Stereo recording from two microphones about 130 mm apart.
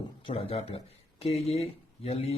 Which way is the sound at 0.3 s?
45° left (ahead or behind).